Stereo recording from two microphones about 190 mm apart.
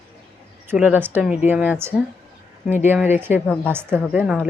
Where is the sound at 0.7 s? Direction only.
10° right (ahead or behind).